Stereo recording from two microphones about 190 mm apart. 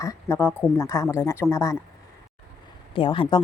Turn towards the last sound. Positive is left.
turn(degrees=25)  # may be behind; listen again after turning